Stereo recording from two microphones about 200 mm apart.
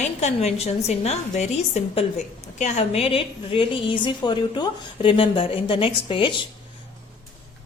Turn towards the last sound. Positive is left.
turn(degrees=25)  # may be behind; listen again after turning